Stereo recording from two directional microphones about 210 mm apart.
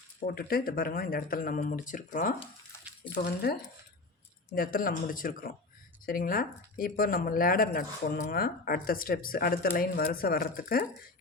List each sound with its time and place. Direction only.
0.3 s speech: 45° left (ahead or behind)
3.2 s speech: 50° left (ahead or behind)